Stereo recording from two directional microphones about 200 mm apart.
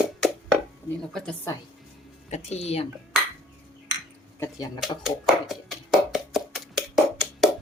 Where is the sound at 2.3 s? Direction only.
30° left (ahead or behind).